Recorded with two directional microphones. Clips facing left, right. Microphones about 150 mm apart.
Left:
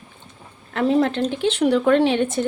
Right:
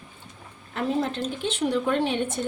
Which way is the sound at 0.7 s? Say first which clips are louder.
Left 8 dB; 80° left.